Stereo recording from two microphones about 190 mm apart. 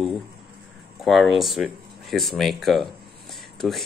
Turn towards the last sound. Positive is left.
turn(degrees=0)  # may be behind; listen again after turning